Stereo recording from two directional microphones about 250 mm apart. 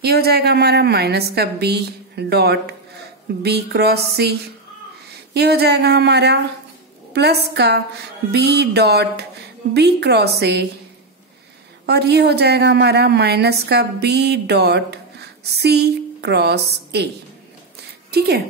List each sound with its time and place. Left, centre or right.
0.0 s a woman's voice: right
11.8 s a woman's voice: right
18.1 s a woman's voice: right